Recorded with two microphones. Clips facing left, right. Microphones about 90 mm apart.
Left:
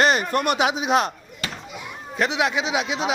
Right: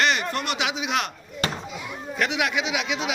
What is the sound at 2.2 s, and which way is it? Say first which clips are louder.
Speech: left 3 dB; 30° left (ahead or behind).